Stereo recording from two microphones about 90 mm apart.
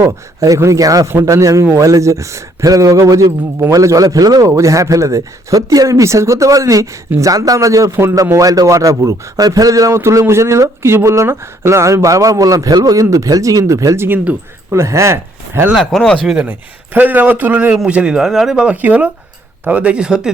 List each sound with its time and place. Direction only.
0.0 s speech: 35° right (ahead or behind)
15.7 s speech: centre (ahead or behind)
16.4 s a man's voice: 20° right (ahead or behind)